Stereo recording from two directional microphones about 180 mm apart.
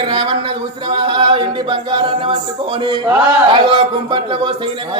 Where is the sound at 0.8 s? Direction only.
25° right (ahead or behind).